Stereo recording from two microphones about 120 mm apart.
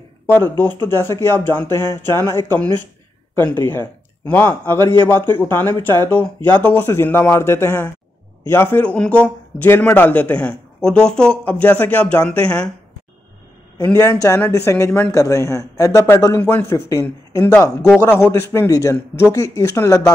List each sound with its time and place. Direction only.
0.3 s a man's voice: 15° left (ahead or behind)
13.9 s a man's voice: 25° left (ahead or behind)